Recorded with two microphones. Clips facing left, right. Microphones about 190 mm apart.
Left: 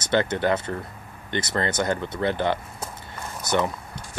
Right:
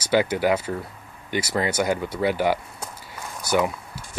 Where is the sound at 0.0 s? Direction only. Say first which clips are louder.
Right 2 dB; 10° right (ahead or behind).